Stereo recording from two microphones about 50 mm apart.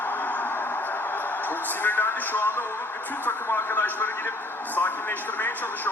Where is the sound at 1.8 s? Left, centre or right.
Left.